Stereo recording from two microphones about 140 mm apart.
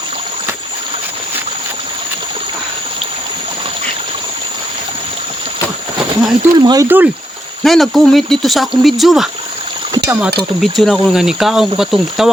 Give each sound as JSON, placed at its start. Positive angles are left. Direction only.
{"t": 6.1, "sound": "speech", "side_deg": -30}
{"t": 6.8, "sound": "speech", "side_deg": -15}
{"t": 7.6, "sound": "speech", "side_deg": 0}
{"t": 10.6, "sound": "speech", "side_deg": 0}